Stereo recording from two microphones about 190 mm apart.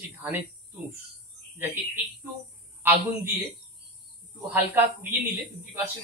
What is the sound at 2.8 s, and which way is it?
Speech, 10° right (ahead or behind).